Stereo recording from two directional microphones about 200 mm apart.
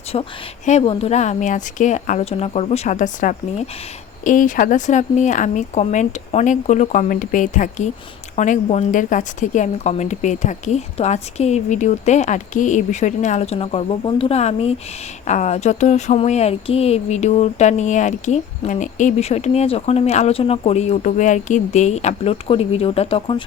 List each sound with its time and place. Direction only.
0.1 s speech: 35° left (ahead or behind)